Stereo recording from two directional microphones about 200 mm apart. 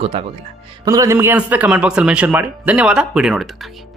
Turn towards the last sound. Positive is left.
turn(degrees=0)  # may be behind; listen again after turning